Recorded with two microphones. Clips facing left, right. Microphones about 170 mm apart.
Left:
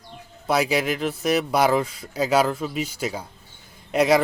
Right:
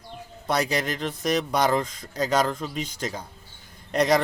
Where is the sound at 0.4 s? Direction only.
5° left (ahead or behind).